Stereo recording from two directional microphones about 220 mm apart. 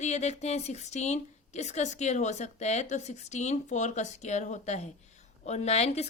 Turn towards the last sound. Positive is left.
turn(degrees=30)  # may be behind; listen again after turning